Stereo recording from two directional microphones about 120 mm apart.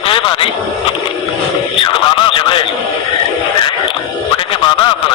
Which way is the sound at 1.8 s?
45° left (ahead or behind).